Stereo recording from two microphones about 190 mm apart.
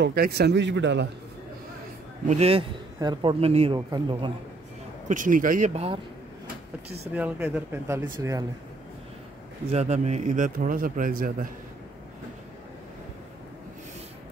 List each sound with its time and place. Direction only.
0.0 s speech: 55° right (ahead or behind)
2.2 s speech: 35° right (ahead or behind)
3.0 s a man's voice: 25° right (ahead or behind)
5.0 s a man's voice: 45° right (ahead or behind)
5.7 s speech: 30° right (ahead or behind)
7.2 s speech: 10° right (ahead or behind)
9.7 s speech: 35° right (ahead or behind)